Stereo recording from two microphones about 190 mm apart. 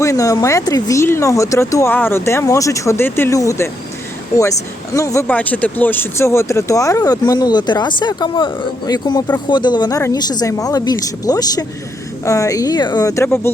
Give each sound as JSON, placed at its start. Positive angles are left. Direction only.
{"t": 0.0, "sound": "speech", "side_deg": 15}
{"t": 4.9, "sound": "speech", "side_deg": 15}